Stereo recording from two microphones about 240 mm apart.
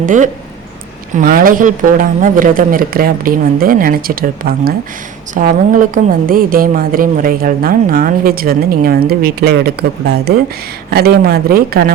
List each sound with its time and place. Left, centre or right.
0.0 s a woman's voice: right